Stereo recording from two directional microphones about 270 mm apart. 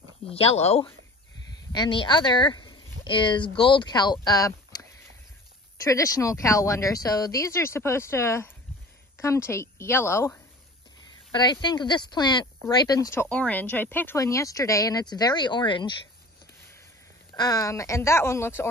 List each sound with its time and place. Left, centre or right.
0.3 s speech: left
17.3 s speech: centre